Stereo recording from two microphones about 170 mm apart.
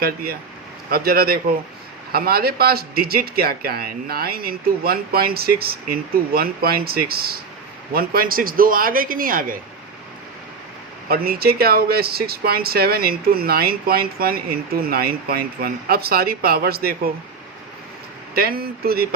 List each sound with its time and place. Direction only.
0.0 s speech: 60° right (ahead or behind)
11.1 s speech: 60° right (ahead or behind)
18.3 s speech: 60° right (ahead or behind)